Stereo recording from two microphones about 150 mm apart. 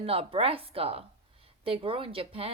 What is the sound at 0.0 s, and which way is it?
A woman's voice, 40° right (ahead or behind).